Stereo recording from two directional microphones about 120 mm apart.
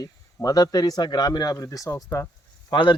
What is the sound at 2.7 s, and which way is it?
Speech, 40° left (ahead or behind).